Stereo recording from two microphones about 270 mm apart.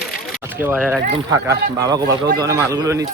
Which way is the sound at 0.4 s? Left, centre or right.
Centre.